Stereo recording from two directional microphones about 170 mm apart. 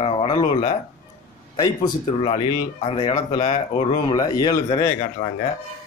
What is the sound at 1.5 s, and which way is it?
Speech, 25° left (ahead or behind).